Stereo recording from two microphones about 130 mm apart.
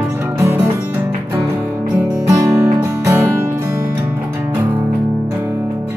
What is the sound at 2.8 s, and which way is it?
Music, 20° right (ahead or behind).